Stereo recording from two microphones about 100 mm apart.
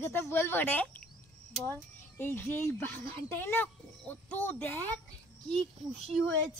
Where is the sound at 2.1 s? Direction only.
20° left (ahead or behind).